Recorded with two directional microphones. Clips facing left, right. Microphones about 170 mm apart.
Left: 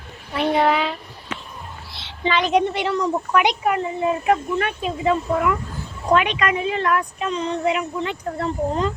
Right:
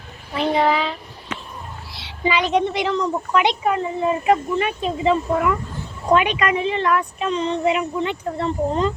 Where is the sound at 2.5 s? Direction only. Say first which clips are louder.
Even; 10° left (ahead or behind).